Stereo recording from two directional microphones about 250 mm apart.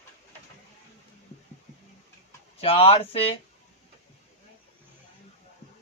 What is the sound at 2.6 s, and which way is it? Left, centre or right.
Speech, left.